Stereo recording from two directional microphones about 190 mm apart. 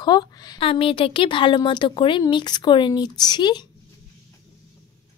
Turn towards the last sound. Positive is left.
turn(degrees=20)  # may be behind; listen again after turning